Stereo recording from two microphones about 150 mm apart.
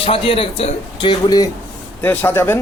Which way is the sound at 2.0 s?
10° left (ahead or behind).